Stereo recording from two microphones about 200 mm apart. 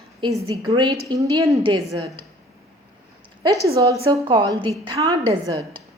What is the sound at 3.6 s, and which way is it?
A woman's voice, 15° right (ahead or behind).